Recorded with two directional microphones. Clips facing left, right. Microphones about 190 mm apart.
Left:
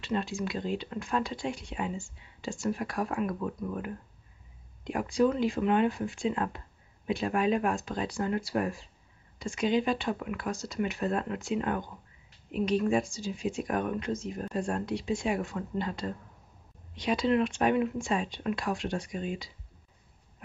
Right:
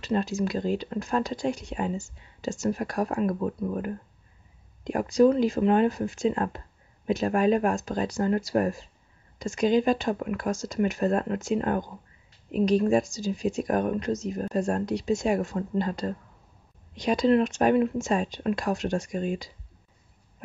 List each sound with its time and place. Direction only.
0.0 s speech: 40° right (ahead or behind)